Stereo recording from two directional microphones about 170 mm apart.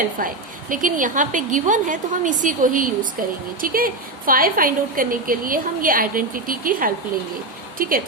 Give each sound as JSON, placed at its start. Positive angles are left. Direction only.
{"t": 0.2, "sound": "a woman's voice", "side_deg": -55}